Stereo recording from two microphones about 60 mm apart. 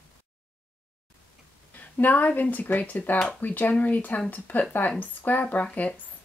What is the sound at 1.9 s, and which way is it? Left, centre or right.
Speech, left.